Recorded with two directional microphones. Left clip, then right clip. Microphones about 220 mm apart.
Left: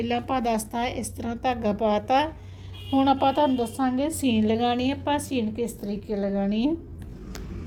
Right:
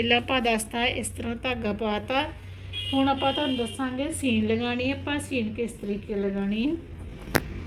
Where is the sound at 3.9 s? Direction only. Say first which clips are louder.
Left 2 dB; 70° left (ahead or behind).